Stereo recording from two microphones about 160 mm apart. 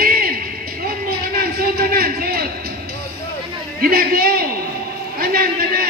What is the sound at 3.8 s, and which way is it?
A man's voice, 65° right (ahead or behind).